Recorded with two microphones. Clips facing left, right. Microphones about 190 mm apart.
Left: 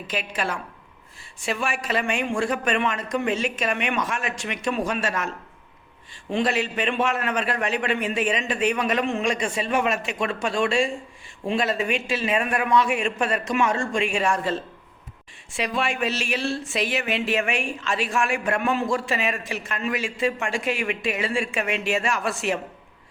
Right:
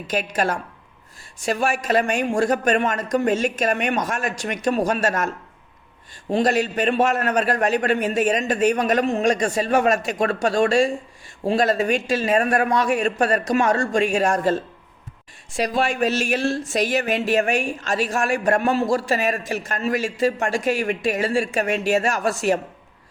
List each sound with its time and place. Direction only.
0.1 s a woman's voice: 45° right (ahead or behind)
6.3 s speech: 40° right (ahead or behind)